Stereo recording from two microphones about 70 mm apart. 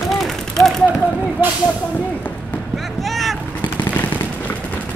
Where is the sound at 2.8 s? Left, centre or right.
Centre.